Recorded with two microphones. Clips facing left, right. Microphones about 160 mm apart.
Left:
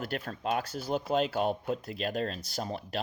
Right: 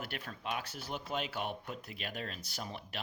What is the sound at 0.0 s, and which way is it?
Speech, 40° left (ahead or behind).